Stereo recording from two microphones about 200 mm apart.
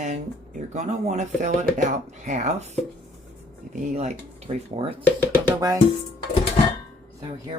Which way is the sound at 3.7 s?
35° right (ahead or behind).